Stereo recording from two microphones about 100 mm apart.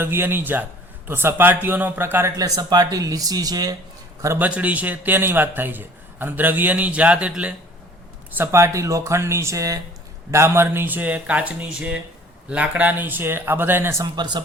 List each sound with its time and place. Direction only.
0.0 s speech: 20° right (ahead or behind)
2.3 s speech: 40° right (ahead or behind)
4.4 s a man's voice: 15° right (ahead or behind)
8.5 s a man's voice: 30° right (ahead or behind)
14.0 s speech: 45° right (ahead or behind)